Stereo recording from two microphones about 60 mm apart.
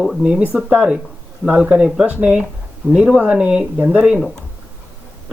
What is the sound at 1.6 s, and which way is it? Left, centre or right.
Speech, centre.